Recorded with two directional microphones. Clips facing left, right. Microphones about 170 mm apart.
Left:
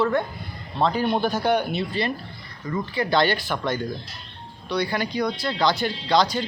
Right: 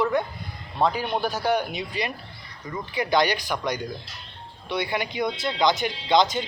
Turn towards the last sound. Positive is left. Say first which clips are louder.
# even
turn(degrees=-20)  # may be behind; listen again after turning